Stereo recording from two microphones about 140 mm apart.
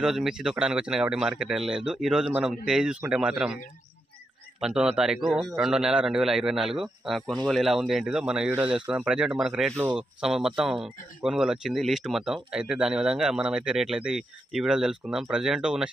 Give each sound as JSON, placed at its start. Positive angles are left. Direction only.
{"t": 0.0, "sound": "speech", "side_deg": -5}
{"t": 4.6, "sound": "speech", "side_deg": -5}